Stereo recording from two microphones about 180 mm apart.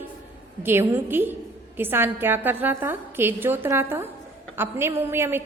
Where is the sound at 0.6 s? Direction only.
10° right (ahead or behind).